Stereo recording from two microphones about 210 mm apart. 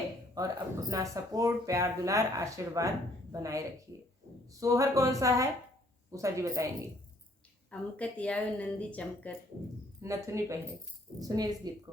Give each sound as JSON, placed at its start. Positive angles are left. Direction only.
{"t": 0.3, "sound": "speech", "side_deg": -15}
{"t": 7.7, "sound": "a woman's voice", "side_deg": 5}
{"t": 10.0, "sound": "speech", "side_deg": -15}